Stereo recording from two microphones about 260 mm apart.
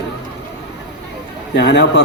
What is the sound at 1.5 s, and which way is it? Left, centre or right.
Speech, left.